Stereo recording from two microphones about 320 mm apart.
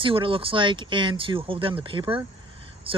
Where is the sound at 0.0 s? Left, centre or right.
Centre.